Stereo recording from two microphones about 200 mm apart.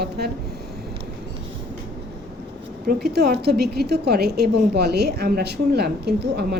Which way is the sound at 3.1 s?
55° right (ahead or behind).